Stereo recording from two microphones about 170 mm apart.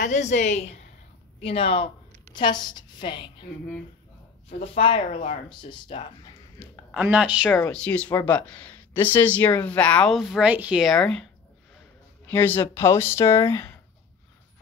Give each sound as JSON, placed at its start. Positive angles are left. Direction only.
{"t": 0.0, "sound": "a woman's voice", "side_deg": 45}
{"t": 4.5, "sound": "speech", "side_deg": 35}
{"t": 6.9, "sound": "speech", "side_deg": -5}
{"t": 12.3, "sound": "speech", "side_deg": 10}